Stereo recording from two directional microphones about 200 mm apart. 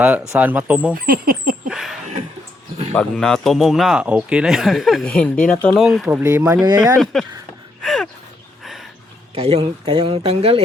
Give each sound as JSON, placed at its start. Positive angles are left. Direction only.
{"t": 0.3, "sound": "speech", "side_deg": -10}
{"t": 0.9, "sound": "speech", "side_deg": -45}
{"t": 1.6, "sound": "a sound", "side_deg": 0}
{"t": 2.9, "sound": "speech", "side_deg": 5}
{"t": 6.1, "sound": "speech", "side_deg": -15}
{"t": 7.0, "sound": "speech", "side_deg": 0}
{"t": 7.8, "sound": "gasp", "side_deg": 0}
{"t": 9.3, "sound": "speech", "side_deg": -30}